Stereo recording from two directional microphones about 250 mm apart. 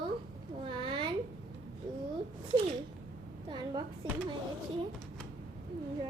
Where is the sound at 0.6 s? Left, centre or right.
Centre.